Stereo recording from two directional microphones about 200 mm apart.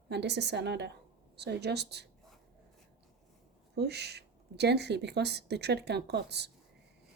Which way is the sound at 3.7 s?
55° right (ahead or behind).